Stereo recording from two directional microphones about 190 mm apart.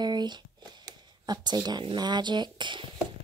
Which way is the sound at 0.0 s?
20° right (ahead or behind).